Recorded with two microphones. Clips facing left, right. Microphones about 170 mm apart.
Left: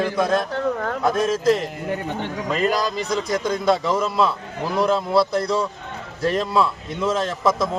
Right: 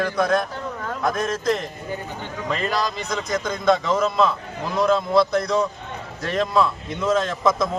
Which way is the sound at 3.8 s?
10° left (ahead or behind).